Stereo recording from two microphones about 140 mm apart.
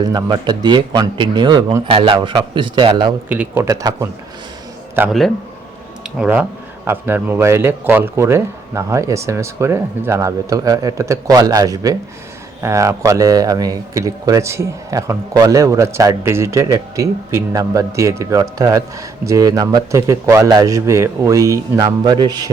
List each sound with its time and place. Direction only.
0.0 s speech: 30° right (ahead or behind)
3.2 s speech: 10° right (ahead or behind)
3.6 s speech: 25° right (ahead or behind)
6.0 s a sound: 10° right (ahead or behind)
6.8 s speech: 15° right (ahead or behind)